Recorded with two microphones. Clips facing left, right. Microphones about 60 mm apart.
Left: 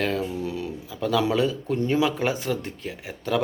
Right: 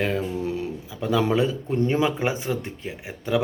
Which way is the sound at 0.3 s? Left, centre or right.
Right.